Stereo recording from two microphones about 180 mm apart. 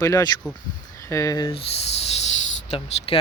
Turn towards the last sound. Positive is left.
turn(degrees=30)  # may be behind; listen again after turning